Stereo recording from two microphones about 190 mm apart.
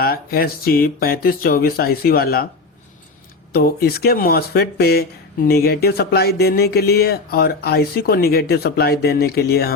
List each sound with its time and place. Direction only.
0.0 s speech: 55° left (ahead or behind)
3.5 s speech: 55° left (ahead or behind)